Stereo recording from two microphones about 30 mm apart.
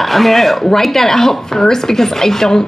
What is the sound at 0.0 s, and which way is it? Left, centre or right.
Speech, centre.